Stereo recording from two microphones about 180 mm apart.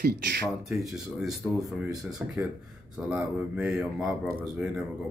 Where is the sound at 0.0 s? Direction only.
65° right (ahead or behind).